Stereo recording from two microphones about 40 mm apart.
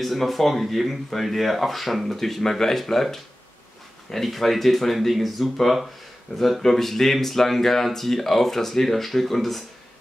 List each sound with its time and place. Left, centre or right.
0.0 s speech: centre